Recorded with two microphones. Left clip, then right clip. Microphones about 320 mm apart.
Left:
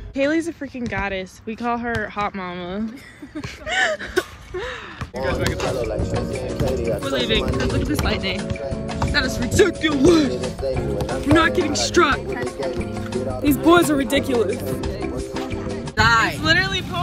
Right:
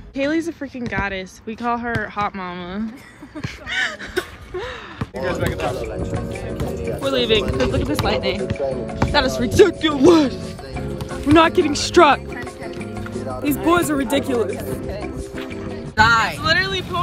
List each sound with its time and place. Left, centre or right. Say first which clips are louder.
0.1 s speech: left 1 dB; centre
6.1 s speech: left 2 dB; centre
13.2 s speech: left 2 dB; centre
16.1 s vehicle: right 1 dB; left
16.4 s vehicle: even; centre